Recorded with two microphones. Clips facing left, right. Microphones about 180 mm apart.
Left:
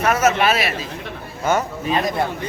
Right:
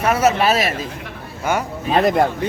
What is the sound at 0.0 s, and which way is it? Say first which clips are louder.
Speech: right 1 dB; 30° right (ahead or behind).